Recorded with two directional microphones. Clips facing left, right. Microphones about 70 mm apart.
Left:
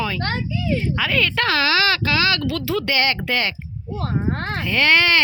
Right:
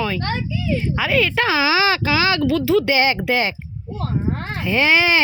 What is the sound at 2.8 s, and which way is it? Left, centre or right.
Speech, centre.